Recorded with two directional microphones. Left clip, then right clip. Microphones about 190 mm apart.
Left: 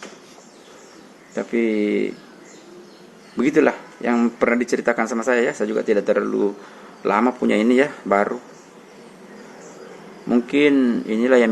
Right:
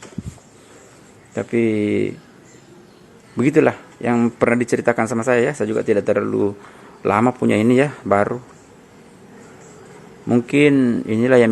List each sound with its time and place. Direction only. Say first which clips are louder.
1.4 s speech: right 2 dB; 45° right (ahead or behind)
3.3 s speech: right 2 dB; 45° right (ahead or behind)
10.2 s speech: right 2 dB; 45° right (ahead or behind)